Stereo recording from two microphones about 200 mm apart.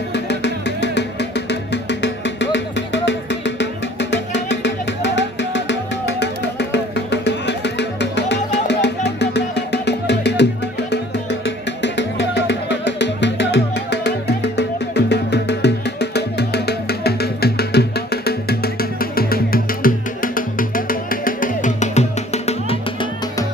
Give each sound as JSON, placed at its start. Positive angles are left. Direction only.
{"t": 0.1, "sound": "music", "side_deg": 60}